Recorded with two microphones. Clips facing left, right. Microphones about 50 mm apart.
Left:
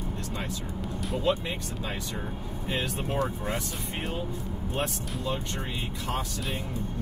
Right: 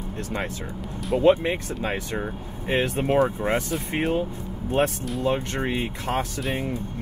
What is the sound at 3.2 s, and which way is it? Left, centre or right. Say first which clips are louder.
Speech: right 8 dB; right.